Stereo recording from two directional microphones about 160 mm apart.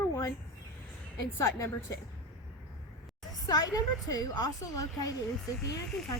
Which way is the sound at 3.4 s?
25° left (ahead or behind).